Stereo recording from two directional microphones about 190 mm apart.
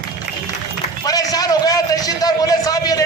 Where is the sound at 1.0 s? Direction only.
20° left (ahead or behind).